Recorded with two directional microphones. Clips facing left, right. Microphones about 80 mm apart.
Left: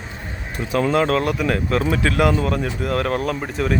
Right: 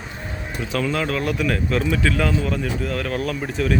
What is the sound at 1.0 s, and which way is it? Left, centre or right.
Speech, left.